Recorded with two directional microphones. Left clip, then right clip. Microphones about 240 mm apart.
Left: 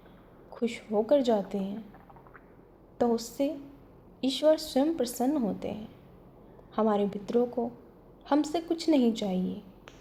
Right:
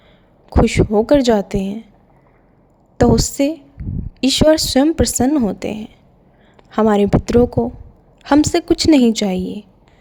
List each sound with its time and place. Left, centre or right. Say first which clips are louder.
0.5 s speech: right 15 dB; right
3.0 s speech: right 13 dB; right